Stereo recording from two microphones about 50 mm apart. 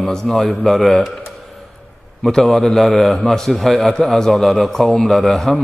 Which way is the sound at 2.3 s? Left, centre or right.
Centre.